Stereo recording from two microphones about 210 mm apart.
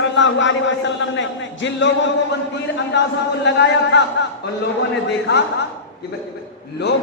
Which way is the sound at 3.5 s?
55° left (ahead or behind).